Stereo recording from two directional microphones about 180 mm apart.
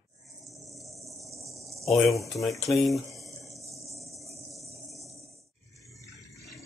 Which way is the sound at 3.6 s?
15° right (ahead or behind).